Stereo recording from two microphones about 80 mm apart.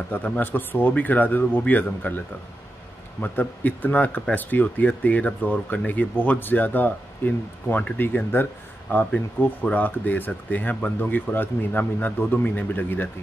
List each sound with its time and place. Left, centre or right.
0.1 s speech: left